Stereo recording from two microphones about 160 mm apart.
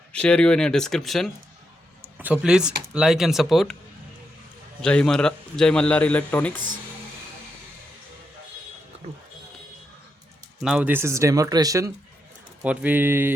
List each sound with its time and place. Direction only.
0.1 s a man's voice: 5° left (ahead or behind)
2.0 s a man's voice: 10° right (ahead or behind)
4.8 s a man's voice: 5° left (ahead or behind)
10.6 s speech: 5° right (ahead or behind); by 11.9 s 20° right (ahead or behind)
12.6 s speech: 10° right (ahead or behind)